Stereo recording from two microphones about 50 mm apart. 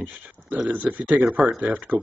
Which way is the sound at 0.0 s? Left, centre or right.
Right.